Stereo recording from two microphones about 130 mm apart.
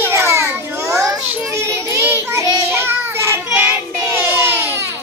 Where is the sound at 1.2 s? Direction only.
15° right (ahead or behind).